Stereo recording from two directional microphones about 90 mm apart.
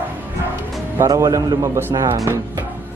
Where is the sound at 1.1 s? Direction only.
40° right (ahead or behind).